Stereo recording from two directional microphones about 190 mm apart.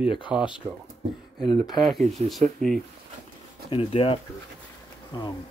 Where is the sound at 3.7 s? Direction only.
30° left (ahead or behind).